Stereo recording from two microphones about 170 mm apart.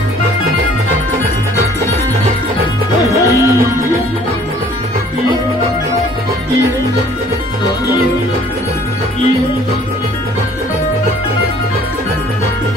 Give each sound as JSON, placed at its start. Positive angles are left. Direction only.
{"t": 3.1, "sound": "music", "side_deg": -15}